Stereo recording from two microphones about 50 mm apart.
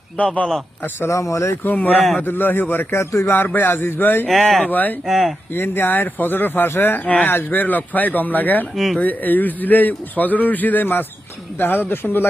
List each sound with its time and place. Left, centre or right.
0.8 s speech: left
1.1 s speech: left
1.6 s a man's voice: left
2.9 s speech: left
3.3 s speech: left
4.3 s speech: centre
4.7 s a man's voice: left
5.0 s speech: centre
5.5 s a man's voice: left
8.7 s speech: centre
9.0 s a man's voice: left